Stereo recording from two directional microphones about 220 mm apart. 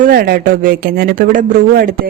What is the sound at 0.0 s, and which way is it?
Speech, 45° right (ahead or behind).